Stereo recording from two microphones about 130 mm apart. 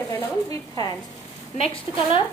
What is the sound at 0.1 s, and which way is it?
Speech, 30° left (ahead or behind).